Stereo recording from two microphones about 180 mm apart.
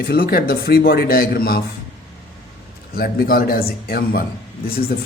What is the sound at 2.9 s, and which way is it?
Speech, 55° left (ahead or behind).